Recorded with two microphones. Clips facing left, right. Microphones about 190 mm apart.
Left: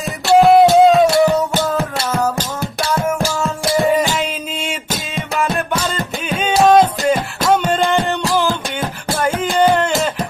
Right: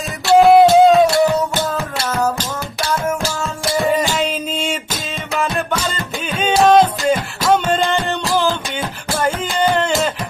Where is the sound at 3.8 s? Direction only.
15° left (ahead or behind).